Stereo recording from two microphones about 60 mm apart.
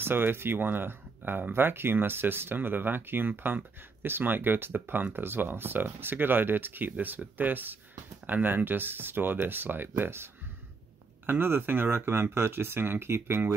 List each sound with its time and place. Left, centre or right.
0.0 s speech: right